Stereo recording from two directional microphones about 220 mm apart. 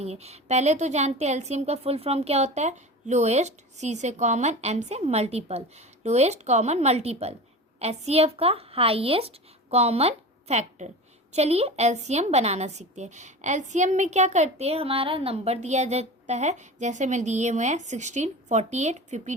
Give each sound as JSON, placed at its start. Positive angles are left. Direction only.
{"t": 0.0, "sound": "a woman's voice", "side_deg": -30}